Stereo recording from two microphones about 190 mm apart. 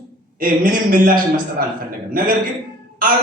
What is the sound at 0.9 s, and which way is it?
A man's voice, 50° right (ahead or behind).